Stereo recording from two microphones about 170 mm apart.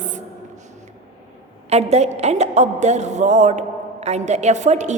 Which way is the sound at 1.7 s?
40° right (ahead or behind).